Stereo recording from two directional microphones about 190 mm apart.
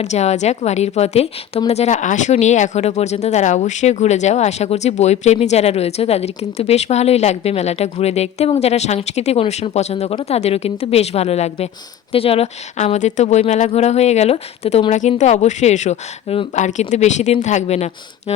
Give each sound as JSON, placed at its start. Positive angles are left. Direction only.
{"t": 0.0, "sound": "a woman's voice", "side_deg": 35}